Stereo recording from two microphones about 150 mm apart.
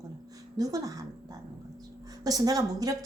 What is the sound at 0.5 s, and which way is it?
Speech, 25° right (ahead or behind).